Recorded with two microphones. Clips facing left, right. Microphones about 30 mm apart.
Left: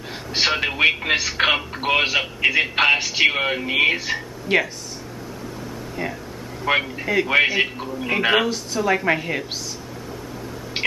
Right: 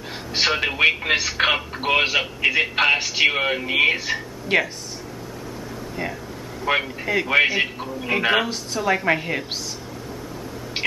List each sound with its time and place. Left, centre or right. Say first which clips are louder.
0.1 s speech: even; centre
6.0 s speech: left 1 dB; centre
6.6 s speech: left 1 dB; centre